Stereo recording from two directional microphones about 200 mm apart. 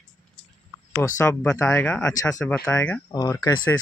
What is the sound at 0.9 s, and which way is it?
Speech, 10° left (ahead or behind).